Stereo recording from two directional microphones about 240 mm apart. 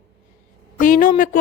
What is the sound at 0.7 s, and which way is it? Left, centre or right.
Speech, left.